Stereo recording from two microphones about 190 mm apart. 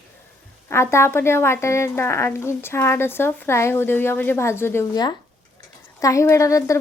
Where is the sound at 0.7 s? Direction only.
15° left (ahead or behind).